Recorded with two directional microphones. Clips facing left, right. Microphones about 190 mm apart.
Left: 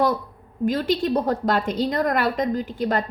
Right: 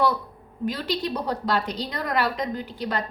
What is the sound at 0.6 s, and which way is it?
A woman's voice, 45° left (ahead or behind).